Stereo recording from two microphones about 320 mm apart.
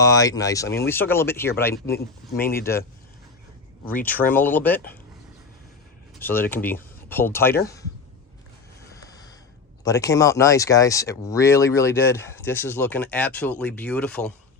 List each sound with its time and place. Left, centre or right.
0.0 s speech: centre
1.7 s speech: left
3.8 s speech: centre
6.1 s speech: centre
9.0 s a sound: centre
9.8 s speech: centre